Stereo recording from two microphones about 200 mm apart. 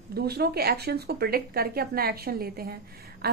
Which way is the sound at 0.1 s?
50° right (ahead or behind).